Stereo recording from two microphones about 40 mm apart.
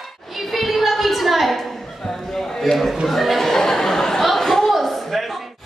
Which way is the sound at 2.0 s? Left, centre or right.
Centre.